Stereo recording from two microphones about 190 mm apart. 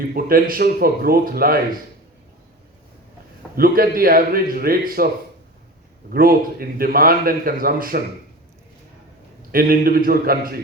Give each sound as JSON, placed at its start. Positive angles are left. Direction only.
{"t": 0.0, "sound": "a man's voice", "side_deg": -50}
{"t": 3.5, "sound": "a man's voice", "side_deg": -50}
{"t": 6.1, "sound": "a man's voice", "side_deg": -50}
{"t": 9.5, "sound": "a man's voice", "side_deg": -50}